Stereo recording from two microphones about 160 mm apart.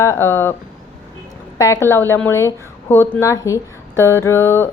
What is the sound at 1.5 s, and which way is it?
Speech, 20° left (ahead or behind).